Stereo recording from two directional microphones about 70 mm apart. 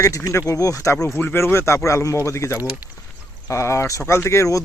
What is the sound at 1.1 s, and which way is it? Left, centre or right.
Speech, left.